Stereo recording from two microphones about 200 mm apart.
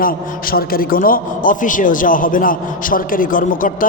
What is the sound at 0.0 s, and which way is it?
A man's voice, 45° left (ahead or behind).